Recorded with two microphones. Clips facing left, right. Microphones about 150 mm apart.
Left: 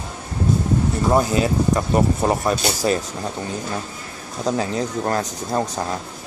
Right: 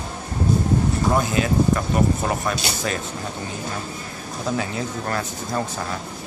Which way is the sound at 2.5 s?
40° left (ahead or behind).